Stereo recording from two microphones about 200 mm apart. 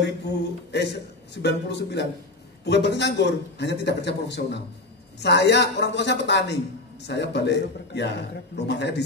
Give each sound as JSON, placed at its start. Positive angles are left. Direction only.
{"t": 0.7, "sound": "a man's voice", "side_deg": 55}